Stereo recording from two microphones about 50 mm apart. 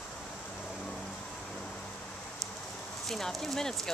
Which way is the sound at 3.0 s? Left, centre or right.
Centre.